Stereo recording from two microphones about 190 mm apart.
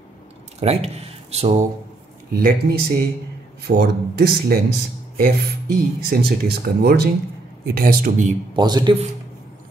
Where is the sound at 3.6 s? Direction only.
55° right (ahead or behind).